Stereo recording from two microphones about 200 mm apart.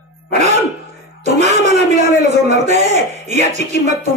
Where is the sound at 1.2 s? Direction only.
35° right (ahead or behind).